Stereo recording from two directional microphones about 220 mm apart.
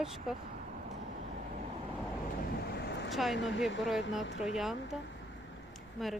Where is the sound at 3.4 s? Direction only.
55° left (ahead or behind).